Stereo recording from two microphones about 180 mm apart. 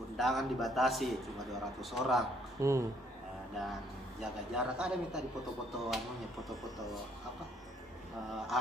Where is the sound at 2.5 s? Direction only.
15° right (ahead or behind).